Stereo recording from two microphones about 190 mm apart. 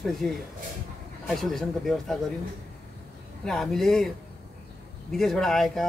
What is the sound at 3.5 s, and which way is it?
Speech, centre (ahead or behind).